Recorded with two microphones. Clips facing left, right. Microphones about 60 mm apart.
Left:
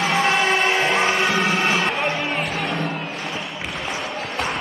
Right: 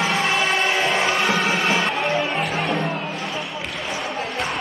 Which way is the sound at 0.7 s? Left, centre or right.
Left.